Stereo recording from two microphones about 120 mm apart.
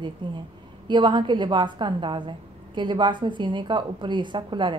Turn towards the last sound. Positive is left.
turn(degrees=-40)  # may be behind; listen again after turning